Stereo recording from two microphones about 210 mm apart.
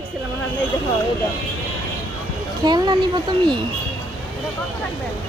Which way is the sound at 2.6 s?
20° right (ahead or behind).